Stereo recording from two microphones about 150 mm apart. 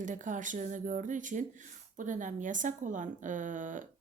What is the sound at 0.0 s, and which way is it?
Speech, 55° right (ahead or behind).